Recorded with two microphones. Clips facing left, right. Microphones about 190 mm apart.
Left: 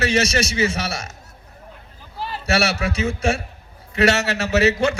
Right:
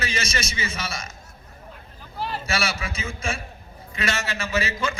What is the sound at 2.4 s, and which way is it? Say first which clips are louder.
A man's voice: left 11 dB; 70° left (ahead or behind).